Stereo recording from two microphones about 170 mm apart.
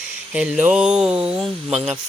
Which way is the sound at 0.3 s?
10° right (ahead or behind).